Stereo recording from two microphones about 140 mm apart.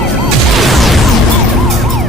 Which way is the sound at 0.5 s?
Centre (ahead or behind).